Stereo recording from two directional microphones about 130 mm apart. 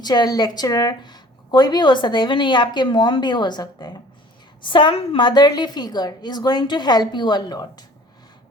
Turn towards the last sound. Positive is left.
turn(degrees=30)  # may be behind; listen again after turning